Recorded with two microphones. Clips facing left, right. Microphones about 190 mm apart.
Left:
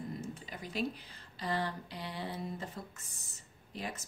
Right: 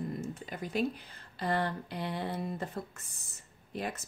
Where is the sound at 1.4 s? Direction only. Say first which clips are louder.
Right 4 dB; 55° right (ahead or behind).